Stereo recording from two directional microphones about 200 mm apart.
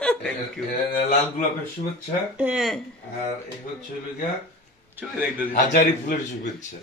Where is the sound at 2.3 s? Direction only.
5° right (ahead or behind).